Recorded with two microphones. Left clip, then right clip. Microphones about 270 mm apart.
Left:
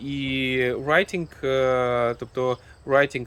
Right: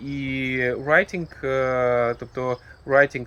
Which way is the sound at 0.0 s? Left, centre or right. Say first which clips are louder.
Left 1 dB; centre.